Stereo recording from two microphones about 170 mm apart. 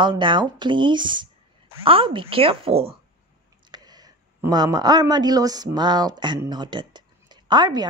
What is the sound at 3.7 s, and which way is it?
Speech, 25° right (ahead or behind).